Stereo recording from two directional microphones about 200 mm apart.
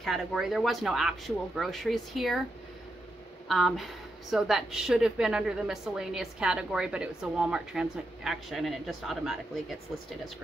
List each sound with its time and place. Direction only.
0.0 s speech: centre (ahead or behind)
3.4 s speech: centre (ahead or behind)